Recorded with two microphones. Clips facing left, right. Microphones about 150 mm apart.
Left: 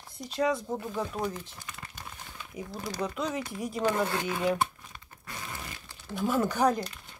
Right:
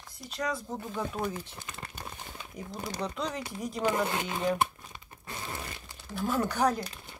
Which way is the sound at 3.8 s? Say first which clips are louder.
Left 1 dB; 15° right (ahead or behind).